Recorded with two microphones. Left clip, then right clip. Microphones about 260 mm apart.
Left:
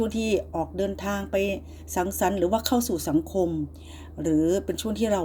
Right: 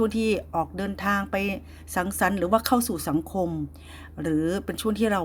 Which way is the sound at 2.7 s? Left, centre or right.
Right.